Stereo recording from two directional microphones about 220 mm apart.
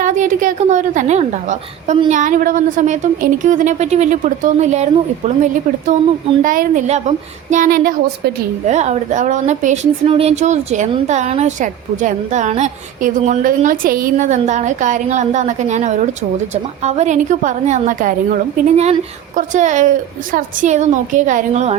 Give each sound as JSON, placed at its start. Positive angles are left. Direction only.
{"t": 0.0, "sound": "a woman's voice", "side_deg": -35}
{"t": 6.4, "sound": "a woman's voice", "side_deg": -35}